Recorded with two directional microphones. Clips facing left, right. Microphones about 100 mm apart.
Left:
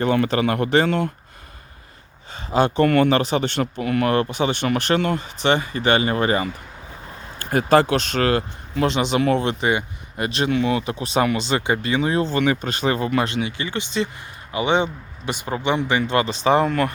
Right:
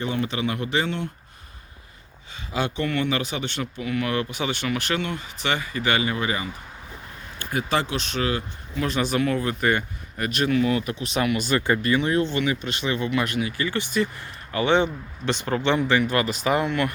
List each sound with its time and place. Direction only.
0.0 s speech: 60° left (ahead or behind)
2.3 s speech: 35° left (ahead or behind)
2.8 s speech: 55° left (ahead or behind)
3.1 s speech: 35° left (ahead or behind)
3.8 s speech: 50° left (ahead or behind)
4.3 s speech: 30° left (ahead or behind)
4.6 s speech: 40° left (ahead or behind)
5.4 s speech: 30° left (ahead or behind); by 8.9 s 55° left (ahead or behind)
9.3 s speech: 80° left
9.6 s speech: 20° left (ahead or behind)
12.4 s speech: 45° left (ahead or behind)